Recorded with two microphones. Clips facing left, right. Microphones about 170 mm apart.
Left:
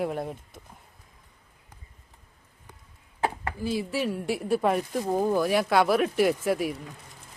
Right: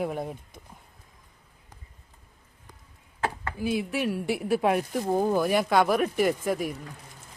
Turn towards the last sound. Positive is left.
turn(degrees=5)  # may be behind; listen again after turning